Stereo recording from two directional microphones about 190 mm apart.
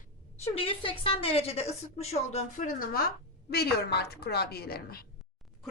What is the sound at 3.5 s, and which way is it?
A woman's voice, 55° left (ahead or behind).